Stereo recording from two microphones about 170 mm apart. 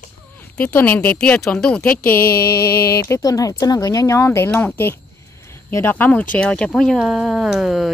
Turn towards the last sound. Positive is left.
turn(degrees=0)  # may be behind; listen again after turning